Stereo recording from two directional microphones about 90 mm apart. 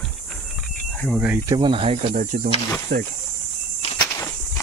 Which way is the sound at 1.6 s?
80° right.